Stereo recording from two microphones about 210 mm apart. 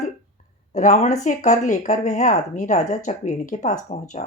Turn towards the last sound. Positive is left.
turn(degrees=35)  # may be behind; listen again after turning